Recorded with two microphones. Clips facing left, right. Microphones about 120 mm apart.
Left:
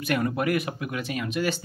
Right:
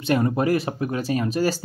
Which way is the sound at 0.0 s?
30° right (ahead or behind).